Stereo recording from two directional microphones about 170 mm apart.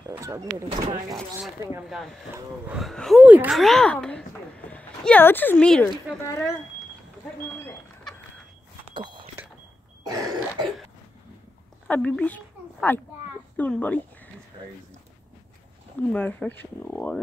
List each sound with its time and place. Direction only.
0.1 s a sound: 15° right (ahead or behind)
0.7 s speech: 25° right (ahead or behind)
2.7 s speech: centre (ahead or behind)
6.2 s speech: 20° left (ahead or behind)
8.9 s a sound: 25° right (ahead or behind)
10.0 s throat clearing: 20° right (ahead or behind)
11.9 s speech: 10° left (ahead or behind)
16.0 s speech: 10° left (ahead or behind)